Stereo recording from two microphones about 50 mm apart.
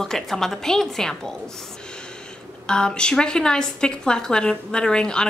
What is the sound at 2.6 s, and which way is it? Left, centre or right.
A woman's voice, centre.